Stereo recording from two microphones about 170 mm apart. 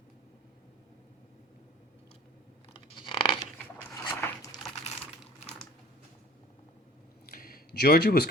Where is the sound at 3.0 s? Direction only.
30° left (ahead or behind).